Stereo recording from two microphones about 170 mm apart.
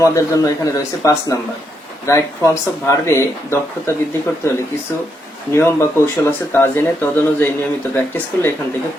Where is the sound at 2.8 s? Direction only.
15° left (ahead or behind).